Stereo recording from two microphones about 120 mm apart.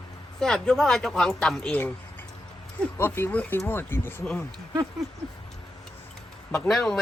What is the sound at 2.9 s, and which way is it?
Speech, 20° left (ahead or behind).